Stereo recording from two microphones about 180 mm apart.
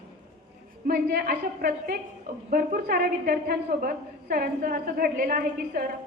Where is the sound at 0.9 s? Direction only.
55° right (ahead or behind).